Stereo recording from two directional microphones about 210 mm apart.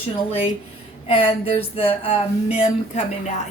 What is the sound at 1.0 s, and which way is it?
A woman's voice, 30° left (ahead or behind).